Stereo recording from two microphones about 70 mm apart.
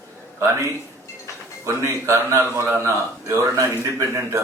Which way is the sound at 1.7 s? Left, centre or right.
Right.